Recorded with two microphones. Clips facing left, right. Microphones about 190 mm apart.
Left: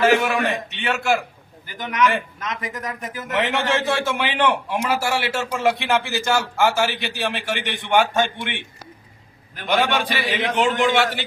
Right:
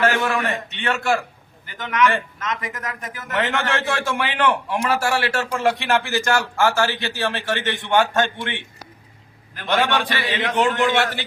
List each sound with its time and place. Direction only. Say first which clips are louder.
0.0 s a man's voice: left 3 dB; 15° left (ahead or behind)
9.6 s a man's voice: even; 15° left (ahead or behind)